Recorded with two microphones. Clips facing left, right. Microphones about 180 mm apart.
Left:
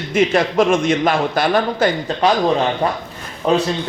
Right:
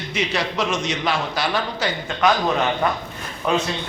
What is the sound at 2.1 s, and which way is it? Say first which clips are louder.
Speech: even; 35° left (ahead or behind).